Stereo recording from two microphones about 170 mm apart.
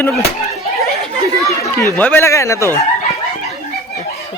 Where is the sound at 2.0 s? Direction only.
10° left (ahead or behind).